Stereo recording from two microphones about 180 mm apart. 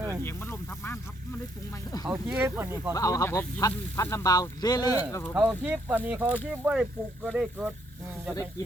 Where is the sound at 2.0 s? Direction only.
15° right (ahead or behind).